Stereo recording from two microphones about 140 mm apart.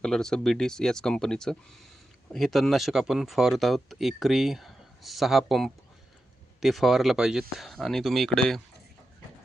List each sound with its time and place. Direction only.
0.0 s speech: 5° left (ahead or behind)